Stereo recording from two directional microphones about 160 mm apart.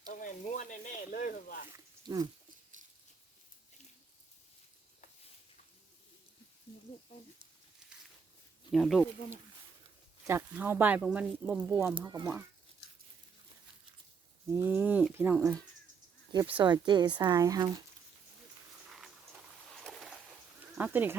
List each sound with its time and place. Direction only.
0.1 s speech: 60° left (ahead or behind)
1.7 s a sound: 25° right (ahead or behind)
8.7 s speech: centre (ahead or behind)
10.2 s speech: 15° right (ahead or behind)
14.5 s speech: 15° right (ahead or behind)
16.6 s speech: 25° right (ahead or behind)
19.7 s boat: centre (ahead or behind)
20.7 s speech: 10° right (ahead or behind)